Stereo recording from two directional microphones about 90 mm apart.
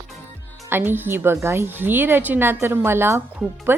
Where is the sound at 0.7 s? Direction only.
25° right (ahead or behind).